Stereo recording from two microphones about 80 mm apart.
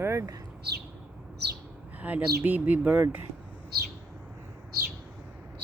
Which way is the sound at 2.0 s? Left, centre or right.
Centre.